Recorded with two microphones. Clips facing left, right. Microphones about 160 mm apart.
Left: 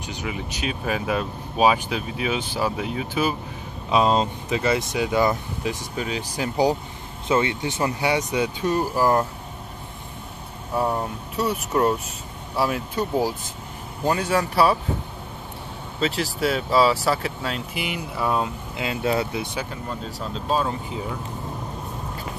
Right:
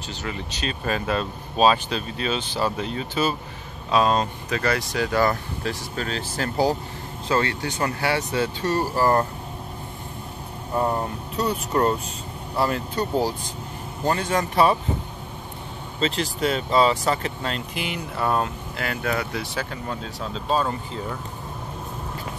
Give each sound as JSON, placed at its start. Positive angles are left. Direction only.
{"t": 0.0, "sound": "speech", "side_deg": 15}
{"t": 3.9, "sound": "speech", "side_deg": 20}
{"t": 10.7, "sound": "speech", "side_deg": 0}
{"t": 16.0, "sound": "speech", "side_deg": 5}
{"t": 18.8, "sound": "speech", "side_deg": 20}
{"t": 19.6, "sound": "speech", "side_deg": 0}